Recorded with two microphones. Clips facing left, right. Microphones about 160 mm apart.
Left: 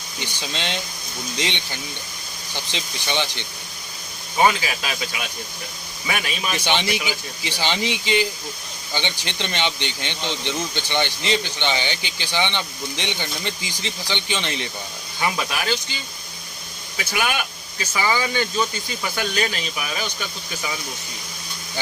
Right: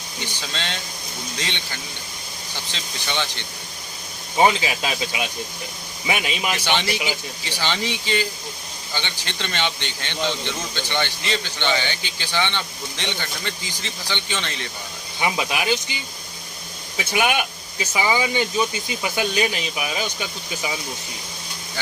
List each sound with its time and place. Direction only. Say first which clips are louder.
0.2 s speech: left 1 dB; 15° left (ahead or behind)
4.4 s speech: right 1 dB; 20° right (ahead or behind)
6.7 s speech: left 2 dB; 15° left (ahead or behind)
15.2 s speech: right 1 dB; 15° right (ahead or behind)